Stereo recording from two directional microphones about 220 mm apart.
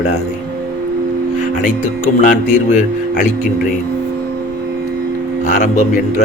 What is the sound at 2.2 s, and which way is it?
Speech, 35° left (ahead or behind).